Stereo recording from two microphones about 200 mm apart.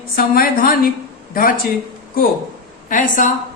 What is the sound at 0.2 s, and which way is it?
Speech, 45° left (ahead or behind).